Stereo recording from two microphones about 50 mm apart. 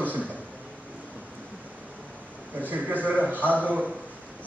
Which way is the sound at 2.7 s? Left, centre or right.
Right.